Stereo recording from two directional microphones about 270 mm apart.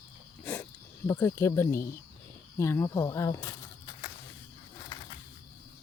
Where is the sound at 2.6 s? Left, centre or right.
Centre.